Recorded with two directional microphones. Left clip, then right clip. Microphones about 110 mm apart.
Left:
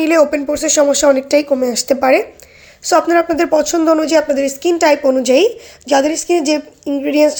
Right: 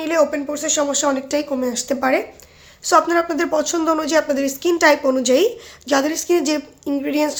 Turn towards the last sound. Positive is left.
turn(degrees=15)  # may be behind; listen again after turning